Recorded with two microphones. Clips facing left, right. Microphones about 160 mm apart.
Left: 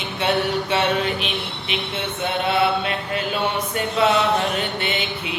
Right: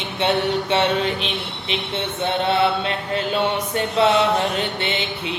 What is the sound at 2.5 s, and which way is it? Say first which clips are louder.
Mantra: left 1 dB; 30° right (ahead or behind).